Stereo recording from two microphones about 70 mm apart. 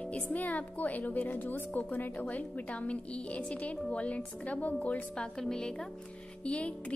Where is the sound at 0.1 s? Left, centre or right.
Left.